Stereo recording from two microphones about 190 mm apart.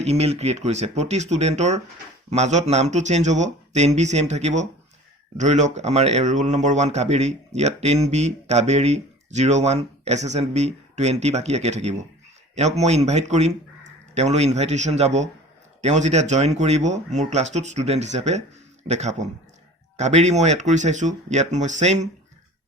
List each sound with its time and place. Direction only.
0.0 s speech: 35° right (ahead or behind)